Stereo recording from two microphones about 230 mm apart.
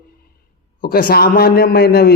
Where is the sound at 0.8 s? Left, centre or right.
Left.